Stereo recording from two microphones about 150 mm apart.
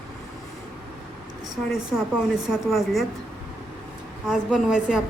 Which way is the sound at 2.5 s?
Centre (ahead or behind).